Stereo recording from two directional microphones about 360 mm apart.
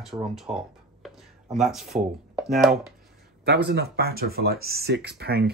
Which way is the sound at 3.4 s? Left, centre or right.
Right.